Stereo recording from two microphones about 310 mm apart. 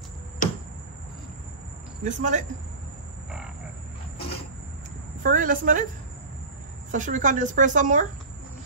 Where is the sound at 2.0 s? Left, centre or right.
Right.